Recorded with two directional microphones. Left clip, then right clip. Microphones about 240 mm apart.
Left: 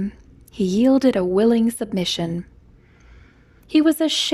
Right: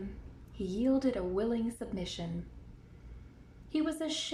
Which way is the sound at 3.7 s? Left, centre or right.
Left.